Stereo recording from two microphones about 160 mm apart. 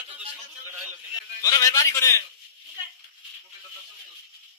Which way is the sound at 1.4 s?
20° left (ahead or behind).